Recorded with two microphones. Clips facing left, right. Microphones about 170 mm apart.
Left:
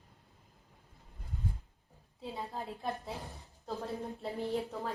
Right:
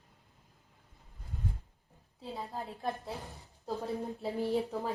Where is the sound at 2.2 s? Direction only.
Centre (ahead or behind).